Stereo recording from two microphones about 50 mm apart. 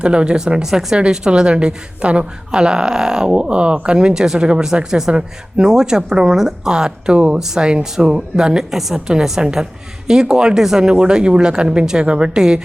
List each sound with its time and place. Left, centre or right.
0.0 s speech: right